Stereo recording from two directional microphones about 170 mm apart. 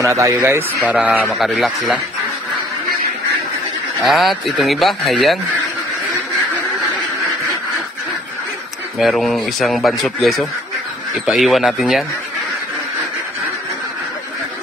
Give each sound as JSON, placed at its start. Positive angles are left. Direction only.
{"t": 0.0, "sound": "speech", "side_deg": -15}
{"t": 1.2, "sound": "speech", "side_deg": 0}
{"t": 4.0, "sound": "speech", "side_deg": 0}
{"t": 8.9, "sound": "speech", "side_deg": 0}